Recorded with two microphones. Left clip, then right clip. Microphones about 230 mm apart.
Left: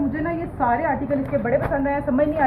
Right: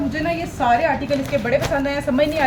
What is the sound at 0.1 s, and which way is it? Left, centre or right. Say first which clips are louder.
A woman's voice: right 3 dB; right.